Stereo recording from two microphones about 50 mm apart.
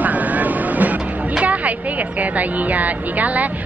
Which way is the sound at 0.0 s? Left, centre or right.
Right.